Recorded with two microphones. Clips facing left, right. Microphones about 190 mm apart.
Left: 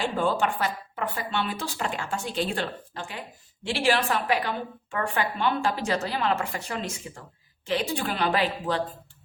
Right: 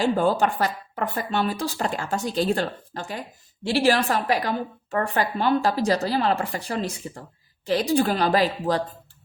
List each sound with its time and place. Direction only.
0.0 s speech: 40° right (ahead or behind)